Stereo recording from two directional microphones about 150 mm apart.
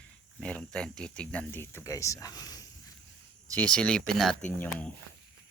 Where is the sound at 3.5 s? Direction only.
10° left (ahead or behind).